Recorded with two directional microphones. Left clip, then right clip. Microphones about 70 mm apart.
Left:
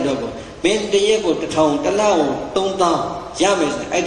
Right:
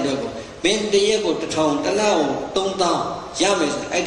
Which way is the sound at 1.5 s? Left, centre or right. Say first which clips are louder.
Left 4 dB; right.